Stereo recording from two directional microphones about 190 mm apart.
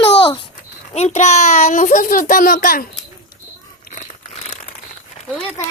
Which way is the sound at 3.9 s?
40° left (ahead or behind).